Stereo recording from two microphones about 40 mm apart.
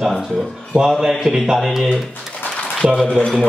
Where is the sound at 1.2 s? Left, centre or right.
Centre.